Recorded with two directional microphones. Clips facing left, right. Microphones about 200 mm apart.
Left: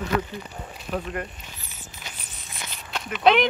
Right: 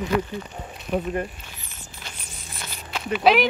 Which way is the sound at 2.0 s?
Centre (ahead or behind).